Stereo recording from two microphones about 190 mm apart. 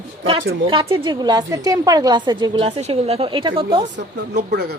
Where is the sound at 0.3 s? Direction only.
25° right (ahead or behind).